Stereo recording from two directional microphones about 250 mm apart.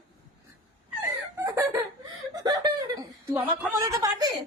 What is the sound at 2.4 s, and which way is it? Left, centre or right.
Chuckle, centre.